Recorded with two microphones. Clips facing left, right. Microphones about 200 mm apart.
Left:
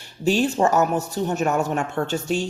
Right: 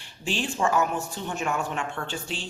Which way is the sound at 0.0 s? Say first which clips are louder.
Left 10 dB; 40° left (ahead or behind).